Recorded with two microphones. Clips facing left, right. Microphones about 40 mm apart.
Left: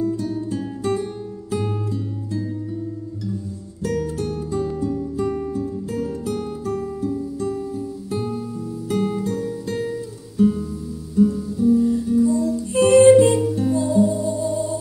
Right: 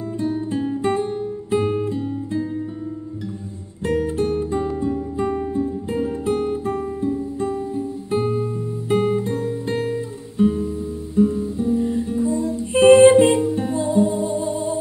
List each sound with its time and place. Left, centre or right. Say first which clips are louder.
0.0 s guitar: left 1 dB; right
3.8 s music: right 3 dB; right